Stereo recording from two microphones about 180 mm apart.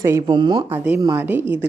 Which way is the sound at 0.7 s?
15° right (ahead or behind).